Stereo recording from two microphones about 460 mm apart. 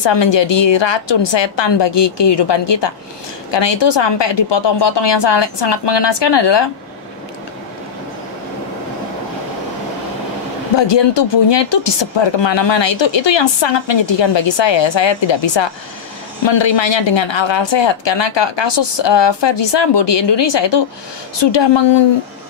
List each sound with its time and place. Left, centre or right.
0.0 s speech: left
10.8 s speech: left